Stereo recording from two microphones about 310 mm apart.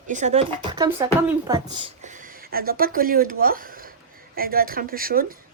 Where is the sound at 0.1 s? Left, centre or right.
Right.